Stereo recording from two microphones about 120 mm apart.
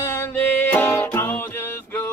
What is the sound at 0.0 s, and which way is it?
Music, 20° left (ahead or behind).